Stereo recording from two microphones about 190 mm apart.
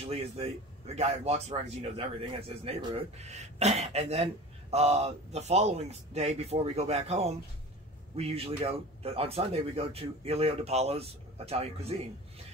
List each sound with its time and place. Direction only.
0.0 s speech: 30° right (ahead or behind)